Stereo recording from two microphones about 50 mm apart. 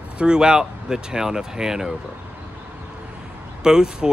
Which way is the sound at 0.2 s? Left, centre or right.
Centre.